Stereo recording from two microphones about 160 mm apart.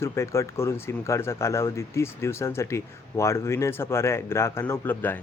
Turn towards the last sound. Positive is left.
turn(degrees=10)  # may be behind; listen again after turning